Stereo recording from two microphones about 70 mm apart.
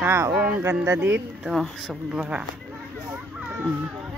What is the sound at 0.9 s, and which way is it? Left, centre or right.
Speech, right.